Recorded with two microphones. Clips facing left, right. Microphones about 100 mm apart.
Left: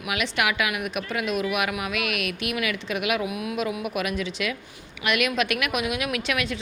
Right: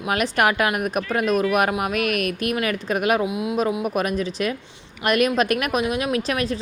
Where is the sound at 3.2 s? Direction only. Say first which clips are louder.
Right 5 dB; 25° right (ahead or behind).